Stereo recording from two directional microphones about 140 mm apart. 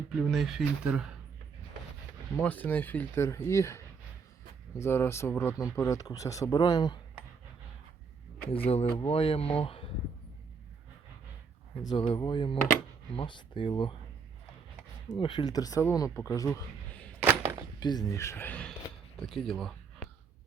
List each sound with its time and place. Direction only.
0.2 s speech: centre (ahead or behind)
2.4 s speech: 10° left (ahead or behind); by 7.0 s 30° left (ahead or behind)
8.5 s speech: 45° left (ahead or behind)
11.9 s speech: 35° left (ahead or behind)
15.1 s speech: 35° left (ahead or behind)
17.2 s a sound: 15° right (ahead or behind)
17.7 s speech: 30° left (ahead or behind); by 20.1 s 5° left (ahead or behind)